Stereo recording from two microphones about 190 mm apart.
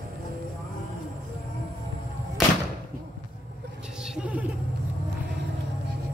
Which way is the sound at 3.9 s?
5° right (ahead or behind).